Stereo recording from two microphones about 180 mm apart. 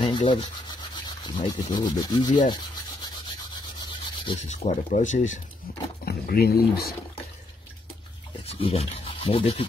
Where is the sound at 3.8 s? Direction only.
30° left (ahead or behind).